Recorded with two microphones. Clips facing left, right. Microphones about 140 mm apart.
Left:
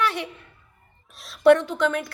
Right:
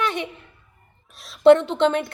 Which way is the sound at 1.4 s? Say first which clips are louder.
Right 3 dB; 25° right (ahead or behind).